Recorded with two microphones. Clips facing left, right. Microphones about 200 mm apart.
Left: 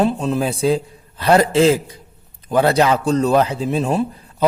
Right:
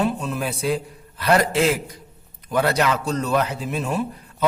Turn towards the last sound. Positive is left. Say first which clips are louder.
# left 6 dB
turn(degrees=30)  # may be behind; listen again after turning